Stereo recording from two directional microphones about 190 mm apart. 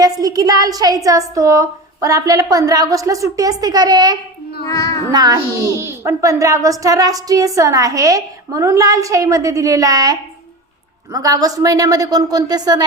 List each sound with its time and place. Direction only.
0.0 s a woman's voice: 20° right (ahead or behind)
4.7 s a child's voice: 15° left (ahead or behind)
5.1 s a woman's voice: 20° right (ahead or behind)